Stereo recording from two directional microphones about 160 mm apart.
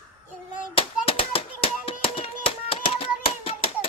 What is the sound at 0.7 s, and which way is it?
Hands, 35° left (ahead or behind).